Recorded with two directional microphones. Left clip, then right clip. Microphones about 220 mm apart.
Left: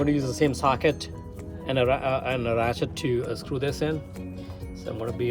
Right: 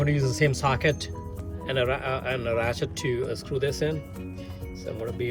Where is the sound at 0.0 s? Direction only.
25° left (ahead or behind).